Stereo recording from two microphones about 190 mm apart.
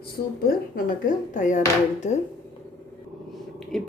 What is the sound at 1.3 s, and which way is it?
Speech, 40° left (ahead or behind).